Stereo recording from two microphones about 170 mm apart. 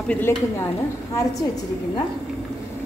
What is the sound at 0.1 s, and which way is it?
Speech, 10° left (ahead or behind).